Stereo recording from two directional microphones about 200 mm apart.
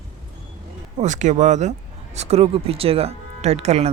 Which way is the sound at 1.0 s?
35° right (ahead or behind).